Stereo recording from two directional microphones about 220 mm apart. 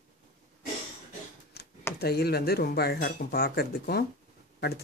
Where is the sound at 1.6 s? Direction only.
45° left (ahead or behind).